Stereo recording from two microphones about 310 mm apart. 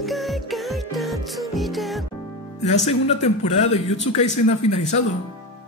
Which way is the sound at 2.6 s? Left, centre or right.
Left.